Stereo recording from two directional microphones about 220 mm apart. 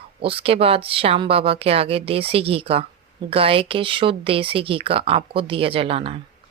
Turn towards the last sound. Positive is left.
turn(degrees=-25)  # may be behind; listen again after turning